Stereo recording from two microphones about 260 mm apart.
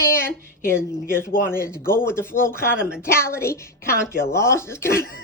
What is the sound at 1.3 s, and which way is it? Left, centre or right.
Speech, left.